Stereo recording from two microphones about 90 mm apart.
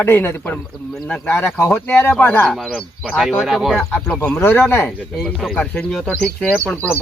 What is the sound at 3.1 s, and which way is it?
Speech, 5° right (ahead or behind).